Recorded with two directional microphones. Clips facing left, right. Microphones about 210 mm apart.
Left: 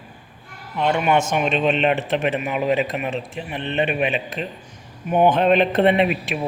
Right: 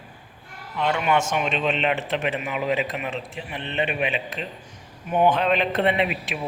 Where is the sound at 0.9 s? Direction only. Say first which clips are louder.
Left 3 dB; 45° left (ahead or behind).